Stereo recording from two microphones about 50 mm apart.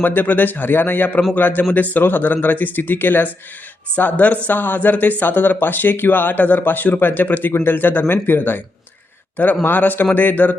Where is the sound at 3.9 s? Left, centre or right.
Left.